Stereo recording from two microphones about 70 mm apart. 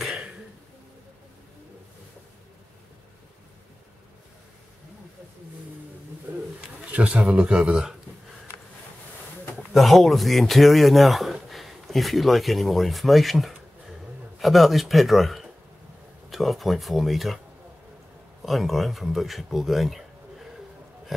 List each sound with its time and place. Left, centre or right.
0.1 s cough: centre
6.3 s pigeon: right
6.9 s speech: centre
9.8 s speech: centre
18.4 s speech: centre